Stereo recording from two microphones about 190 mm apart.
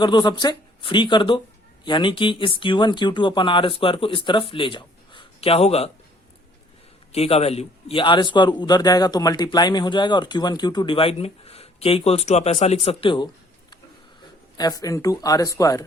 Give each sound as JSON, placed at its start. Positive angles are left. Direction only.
{"t": 0.0, "sound": "a man's voice", "side_deg": 25}
{"t": 7.1, "sound": "a man's voice", "side_deg": 30}